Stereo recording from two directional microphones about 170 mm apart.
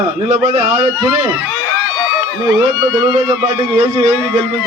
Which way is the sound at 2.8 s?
25° right (ahead or behind).